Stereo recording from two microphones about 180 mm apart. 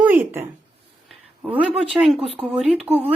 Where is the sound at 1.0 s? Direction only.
5° right (ahead or behind).